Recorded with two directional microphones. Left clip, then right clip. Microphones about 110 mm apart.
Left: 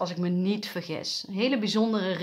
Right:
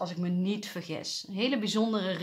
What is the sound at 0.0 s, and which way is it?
Speech, 30° left (ahead or behind).